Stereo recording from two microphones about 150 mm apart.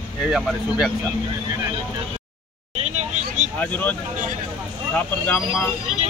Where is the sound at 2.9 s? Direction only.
50° right (ahead or behind).